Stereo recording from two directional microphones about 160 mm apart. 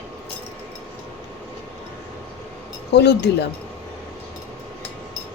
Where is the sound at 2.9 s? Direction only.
90° left.